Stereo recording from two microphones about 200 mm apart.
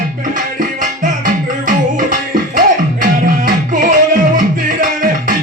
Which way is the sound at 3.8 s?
40° right (ahead or behind).